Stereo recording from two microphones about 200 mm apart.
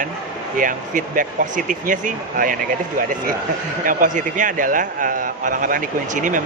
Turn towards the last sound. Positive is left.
turn(degrees=-40)  # may be behind; listen again after turning